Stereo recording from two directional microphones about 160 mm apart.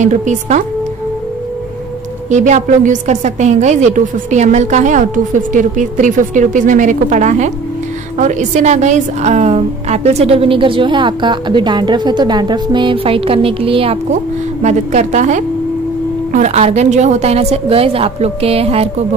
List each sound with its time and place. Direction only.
0.0 s a woman's voice: 50° right (ahead or behind)
2.2 s a woman's voice: 45° right (ahead or behind)
14.6 s a woman's voice: 45° right (ahead or behind)